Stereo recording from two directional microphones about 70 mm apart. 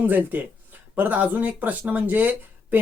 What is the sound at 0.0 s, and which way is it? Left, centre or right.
Speech, right.